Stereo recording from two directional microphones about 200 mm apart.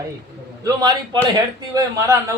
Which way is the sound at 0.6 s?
20° right (ahead or behind).